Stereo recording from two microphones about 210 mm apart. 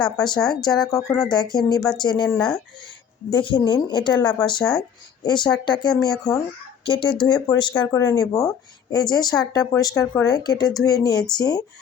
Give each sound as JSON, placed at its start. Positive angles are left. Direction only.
{"t": 0.0, "sound": "speech", "side_deg": 20}
{"t": 2.3, "sound": "speech", "side_deg": 5}
{"t": 3.2, "sound": "speech", "side_deg": 20}